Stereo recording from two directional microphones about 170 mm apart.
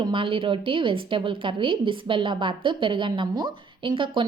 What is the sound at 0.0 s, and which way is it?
A woman's voice, 30° right (ahead or behind).